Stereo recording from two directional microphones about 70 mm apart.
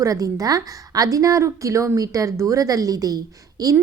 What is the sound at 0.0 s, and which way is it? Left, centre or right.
A woman's voice, right.